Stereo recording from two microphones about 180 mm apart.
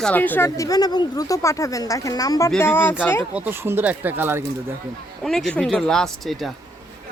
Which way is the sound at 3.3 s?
10° right (ahead or behind).